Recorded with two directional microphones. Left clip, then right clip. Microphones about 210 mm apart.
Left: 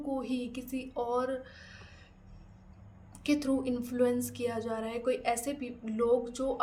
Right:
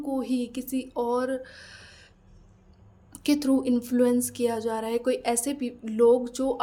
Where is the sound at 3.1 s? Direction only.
35° right (ahead or behind).